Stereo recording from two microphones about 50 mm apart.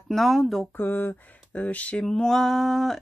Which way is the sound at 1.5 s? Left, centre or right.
Left.